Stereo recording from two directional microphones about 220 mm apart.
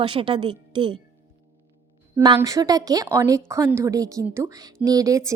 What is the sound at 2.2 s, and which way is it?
Speech, 15° right (ahead or behind).